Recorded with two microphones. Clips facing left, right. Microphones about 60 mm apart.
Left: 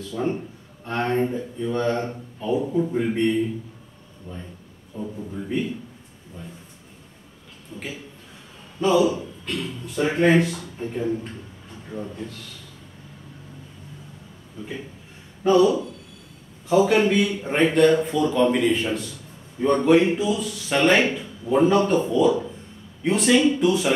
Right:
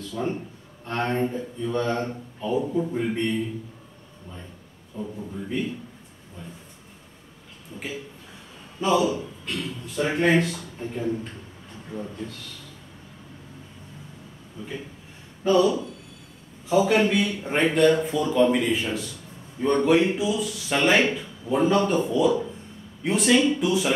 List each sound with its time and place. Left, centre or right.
0.1 s speech: centre
0.8 s a man's voice: centre
4.9 s speech: centre
7.7 s a man's voice: centre
11.9 s a man's voice: centre
15.4 s a man's voice: centre